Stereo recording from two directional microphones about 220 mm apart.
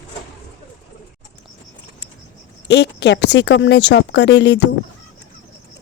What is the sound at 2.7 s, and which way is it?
Speech, 50° left (ahead or behind).